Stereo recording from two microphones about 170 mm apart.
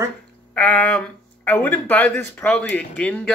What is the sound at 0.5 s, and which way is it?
Speech, 10° left (ahead or behind).